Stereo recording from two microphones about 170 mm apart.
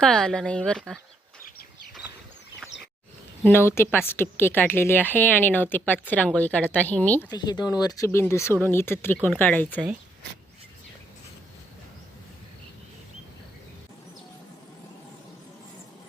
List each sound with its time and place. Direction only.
0.0 s speech: 5° left (ahead or behind)
3.4 s a woman's voice: 15° left (ahead or behind)
7.3 s a woman's voice: 25° left (ahead or behind)